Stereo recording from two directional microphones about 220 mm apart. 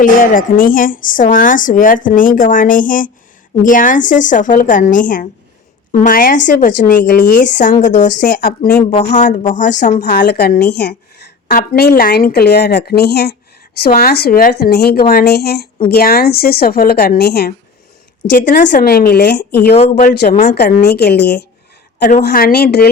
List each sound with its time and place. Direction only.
0.0 s speech: 40° left (ahead or behind)
10.0 s a woman's voice: 50° left (ahead or behind)
18.3 s speech: 35° left (ahead or behind)
19.7 s speech: 35° left (ahead or behind)
20.3 s speech: 35° left (ahead or behind)
20.6 s a woman's voice: 45° left (ahead or behind)